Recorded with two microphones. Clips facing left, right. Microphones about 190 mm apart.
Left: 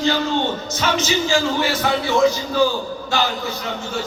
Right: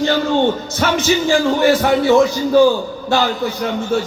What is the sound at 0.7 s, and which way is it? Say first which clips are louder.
Speech: right 4 dB; 55° right (ahead or behind).